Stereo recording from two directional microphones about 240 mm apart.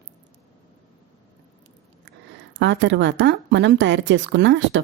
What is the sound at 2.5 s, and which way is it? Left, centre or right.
A woman's voice, right.